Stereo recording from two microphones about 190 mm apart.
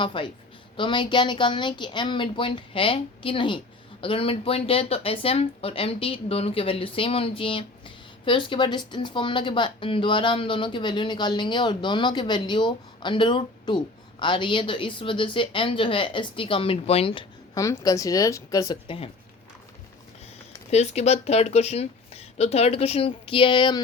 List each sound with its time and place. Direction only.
0.0 s speech: 25° left (ahead or behind)
20.7 s speech: 35° left (ahead or behind)